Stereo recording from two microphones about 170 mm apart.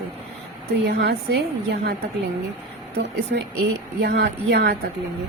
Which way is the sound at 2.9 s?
85° right.